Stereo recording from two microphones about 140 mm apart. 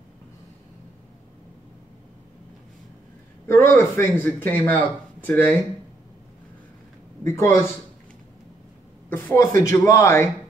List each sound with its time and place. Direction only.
3.4 s speech: 15° left (ahead or behind)
7.2 s speech: 20° left (ahead or behind)
9.1 s speech: 20° left (ahead or behind)